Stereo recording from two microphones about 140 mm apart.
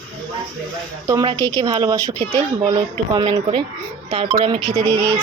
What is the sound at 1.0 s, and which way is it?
A woman's voice, 25° right (ahead or behind).